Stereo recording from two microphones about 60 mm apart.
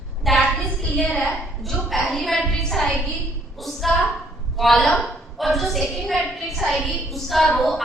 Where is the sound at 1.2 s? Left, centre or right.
Centre.